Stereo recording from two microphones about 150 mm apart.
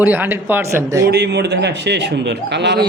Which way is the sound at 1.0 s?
90° right.